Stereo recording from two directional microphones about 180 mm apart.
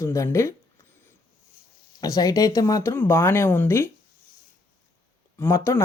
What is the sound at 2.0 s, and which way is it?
Speech, 20° left (ahead or behind).